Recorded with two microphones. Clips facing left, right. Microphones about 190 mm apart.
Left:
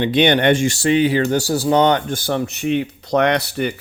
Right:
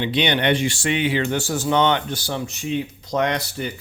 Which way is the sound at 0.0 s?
50° left (ahead or behind).